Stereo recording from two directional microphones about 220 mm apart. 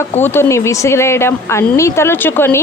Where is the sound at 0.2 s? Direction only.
10° left (ahead or behind).